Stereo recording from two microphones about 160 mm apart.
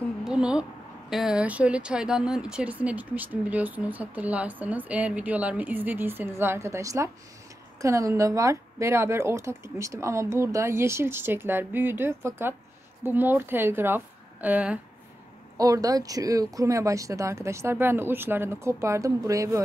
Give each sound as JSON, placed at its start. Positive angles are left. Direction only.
{"t": 0.2, "sound": "a woman's voice", "side_deg": -5}
{"t": 15.5, "sound": "speech", "side_deg": -20}